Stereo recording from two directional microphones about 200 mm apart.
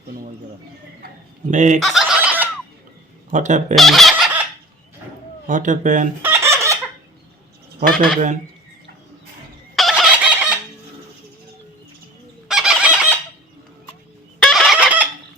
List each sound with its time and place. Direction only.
1.0 s speech: 40° right (ahead or behind)
1.8 s fowl: centre (ahead or behind)
3.3 s speech: 40° right (ahead or behind)
3.8 s fowl: centre (ahead or behind)
5.5 s speech: 40° right (ahead or behind)
6.2 s fowl: 10° right (ahead or behind)
7.8 s speech: 45° right (ahead or behind)
9.7 s chicken: centre (ahead or behind)
12.5 s fowl: 5° right (ahead or behind)
14.4 s fowl: centre (ahead or behind)